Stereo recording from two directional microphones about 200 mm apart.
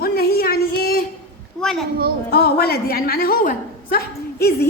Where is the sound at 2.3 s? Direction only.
50° left (ahead or behind).